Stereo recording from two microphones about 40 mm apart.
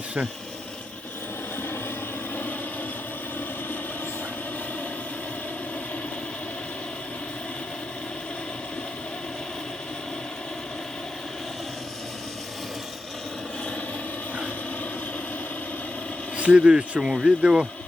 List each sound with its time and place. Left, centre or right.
2.3 s vehicle: left
16.4 s speech: right